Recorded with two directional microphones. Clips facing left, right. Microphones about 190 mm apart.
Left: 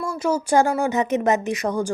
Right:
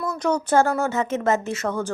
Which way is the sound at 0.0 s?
10° left (ahead or behind).